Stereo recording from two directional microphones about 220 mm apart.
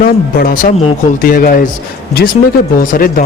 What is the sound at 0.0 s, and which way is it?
Speech, 40° left (ahead or behind).